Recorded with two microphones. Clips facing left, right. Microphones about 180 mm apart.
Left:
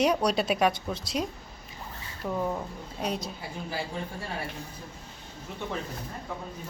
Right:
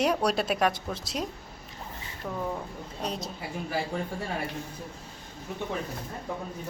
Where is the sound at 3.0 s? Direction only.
Centre (ahead or behind).